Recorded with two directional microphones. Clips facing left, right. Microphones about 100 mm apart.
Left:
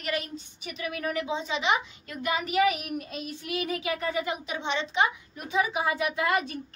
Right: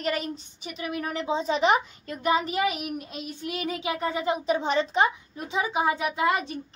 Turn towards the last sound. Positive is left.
turn(degrees=-20)  # may be behind; listen again after turning